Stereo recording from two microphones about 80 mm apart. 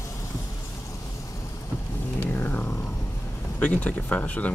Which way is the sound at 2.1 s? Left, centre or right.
Left.